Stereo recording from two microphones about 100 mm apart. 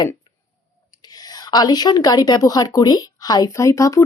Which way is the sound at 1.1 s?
40° left (ahead or behind).